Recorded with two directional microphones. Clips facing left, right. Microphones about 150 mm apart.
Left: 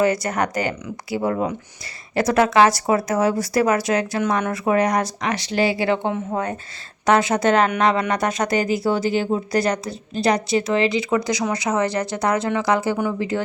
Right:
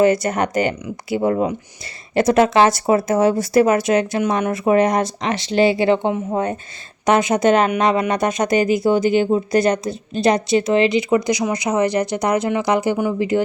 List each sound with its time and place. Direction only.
0.0 s speech: 25° right (ahead or behind)